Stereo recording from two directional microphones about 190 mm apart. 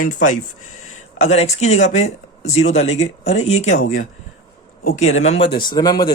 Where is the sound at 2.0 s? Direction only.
90° left.